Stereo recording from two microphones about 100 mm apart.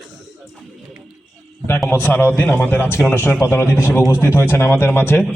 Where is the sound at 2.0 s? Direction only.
20° left (ahead or behind).